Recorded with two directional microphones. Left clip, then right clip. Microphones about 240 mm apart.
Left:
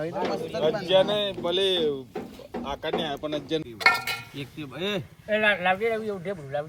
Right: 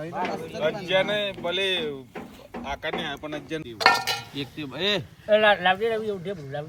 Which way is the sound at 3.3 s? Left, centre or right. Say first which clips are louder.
Left 2 dB; right.